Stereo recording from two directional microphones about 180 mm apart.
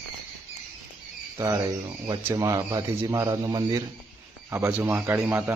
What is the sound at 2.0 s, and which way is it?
Speech, 20° right (ahead or behind).